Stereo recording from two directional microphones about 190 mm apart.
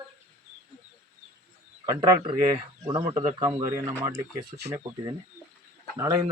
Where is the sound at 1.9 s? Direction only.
20° right (ahead or behind).